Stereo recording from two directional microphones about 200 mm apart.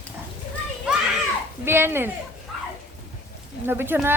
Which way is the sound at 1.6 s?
10° right (ahead or behind).